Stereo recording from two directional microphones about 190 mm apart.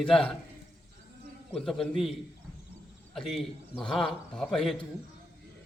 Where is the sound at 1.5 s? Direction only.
Centre (ahead or behind).